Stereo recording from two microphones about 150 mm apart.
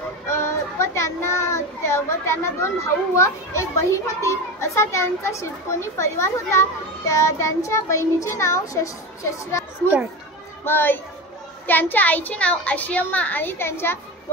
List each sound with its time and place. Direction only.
0.3 s a child's voice: 20° left (ahead or behind)
10.6 s a child's voice: 15° left (ahead or behind)